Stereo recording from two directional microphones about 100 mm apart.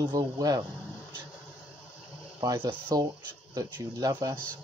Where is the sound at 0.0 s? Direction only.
45° right (ahead or behind).